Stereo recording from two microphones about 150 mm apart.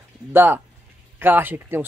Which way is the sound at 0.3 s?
15° right (ahead or behind).